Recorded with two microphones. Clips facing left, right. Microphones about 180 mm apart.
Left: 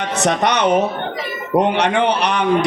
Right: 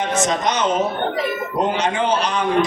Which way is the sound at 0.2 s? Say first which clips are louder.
Left 5 dB; 65° left (ahead or behind).